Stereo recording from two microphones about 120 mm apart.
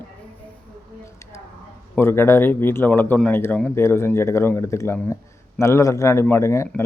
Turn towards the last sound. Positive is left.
turn(degrees=25)  # may be behind; listen again after turning